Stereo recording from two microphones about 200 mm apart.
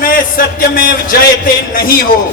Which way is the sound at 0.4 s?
45° left (ahead or behind).